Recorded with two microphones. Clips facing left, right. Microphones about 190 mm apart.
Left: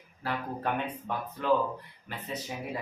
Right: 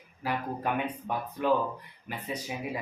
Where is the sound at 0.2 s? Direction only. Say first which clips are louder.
Right 2 dB; 10° right (ahead or behind).